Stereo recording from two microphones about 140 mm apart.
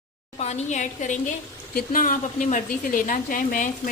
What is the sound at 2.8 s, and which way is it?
Speech, 75° left (ahead or behind).